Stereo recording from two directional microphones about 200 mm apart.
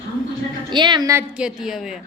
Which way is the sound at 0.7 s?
20° right (ahead or behind).